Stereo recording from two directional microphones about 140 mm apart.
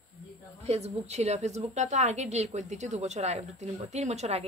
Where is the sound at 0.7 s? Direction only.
50° right (ahead or behind).